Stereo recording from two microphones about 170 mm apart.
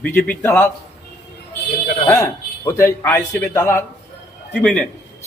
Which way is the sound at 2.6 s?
15° left (ahead or behind).